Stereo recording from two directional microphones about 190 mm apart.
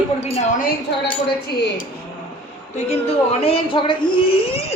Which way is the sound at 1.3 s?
55° left (ahead or behind).